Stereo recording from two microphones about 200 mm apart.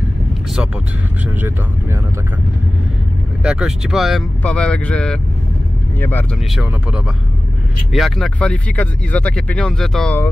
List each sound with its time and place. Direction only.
3.4 s speech: 5° right (ahead or behind)
6.5 s speech: 5° right (ahead or behind)